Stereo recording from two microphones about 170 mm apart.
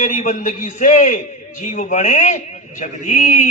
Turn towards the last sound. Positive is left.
turn(degrees=45)  # may be behind; listen again after turning